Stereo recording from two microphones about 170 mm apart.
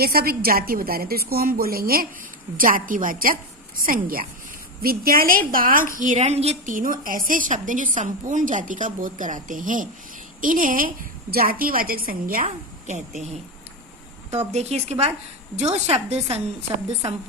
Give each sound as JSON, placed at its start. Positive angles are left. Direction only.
{"t": 0.0, "sound": "a woman's voice", "side_deg": -65}
{"t": 12.5, "sound": "a woman's voice", "side_deg": -40}